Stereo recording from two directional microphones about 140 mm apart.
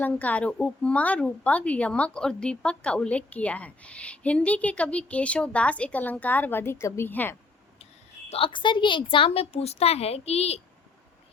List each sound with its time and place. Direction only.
0.0 s a woman's voice: 10° left (ahead or behind)
8.3 s a woman's voice: 40° left (ahead or behind)